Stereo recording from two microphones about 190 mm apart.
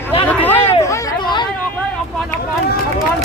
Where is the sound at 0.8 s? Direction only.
15° left (ahead or behind).